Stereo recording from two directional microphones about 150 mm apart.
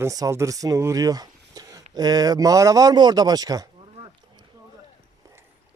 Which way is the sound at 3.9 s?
35° right (ahead or behind).